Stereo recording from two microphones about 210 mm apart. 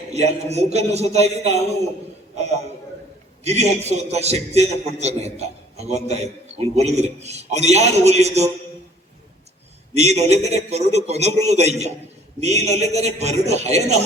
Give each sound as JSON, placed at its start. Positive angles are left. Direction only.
{"t": 0.1, "sound": "a man's voice", "side_deg": -30}
{"t": 9.9, "sound": "a man's voice", "side_deg": -30}